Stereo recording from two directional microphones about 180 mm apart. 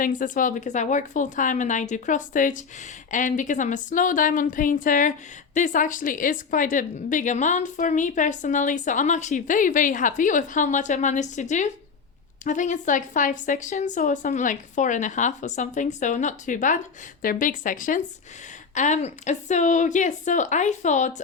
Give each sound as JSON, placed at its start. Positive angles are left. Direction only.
{"t": 0.0, "sound": "a woman's voice", "side_deg": 45}